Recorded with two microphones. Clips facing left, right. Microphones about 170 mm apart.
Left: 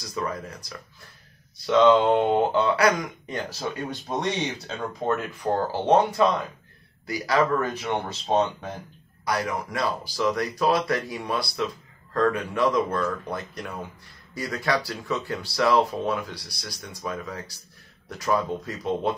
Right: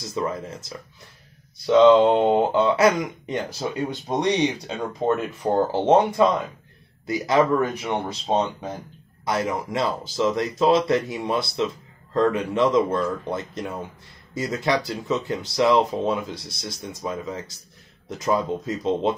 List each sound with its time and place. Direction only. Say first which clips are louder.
0.0 s speech: right 3 dB; 25° right (ahead or behind)
1.7 s speech: right 4 dB; 15° right (ahead or behind)